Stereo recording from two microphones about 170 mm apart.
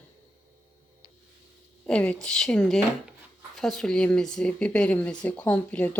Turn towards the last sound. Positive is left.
turn(degrees=10)  # may be behind; listen again after turning